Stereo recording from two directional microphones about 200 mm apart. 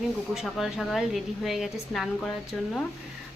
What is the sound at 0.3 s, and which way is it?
A woman's voice, centre (ahead or behind).